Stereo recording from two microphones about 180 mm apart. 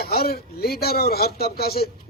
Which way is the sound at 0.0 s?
60° left (ahead or behind).